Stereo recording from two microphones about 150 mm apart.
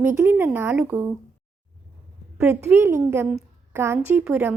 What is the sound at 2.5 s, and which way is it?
A woman's voice, 15° right (ahead or behind).